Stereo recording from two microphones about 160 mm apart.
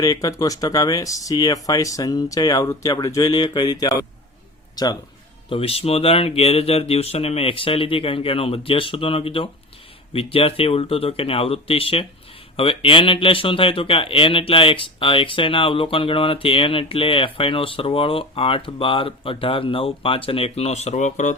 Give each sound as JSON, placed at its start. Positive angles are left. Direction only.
{"t": 0.0, "sound": "speech", "side_deg": 20}
{"t": 4.7, "sound": "a sound", "side_deg": 25}
{"t": 5.5, "sound": "speech", "side_deg": 35}